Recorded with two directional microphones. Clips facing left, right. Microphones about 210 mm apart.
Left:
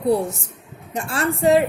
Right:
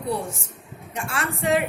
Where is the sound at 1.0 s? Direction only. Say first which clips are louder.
Left 6 dB; 35° left (ahead or behind).